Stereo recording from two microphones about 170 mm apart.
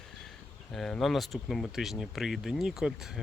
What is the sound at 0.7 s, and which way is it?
Speech, centre (ahead or behind).